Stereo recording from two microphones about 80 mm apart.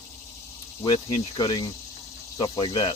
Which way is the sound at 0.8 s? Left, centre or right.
Left.